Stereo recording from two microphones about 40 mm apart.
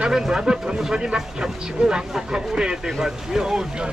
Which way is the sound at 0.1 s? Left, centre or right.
Centre.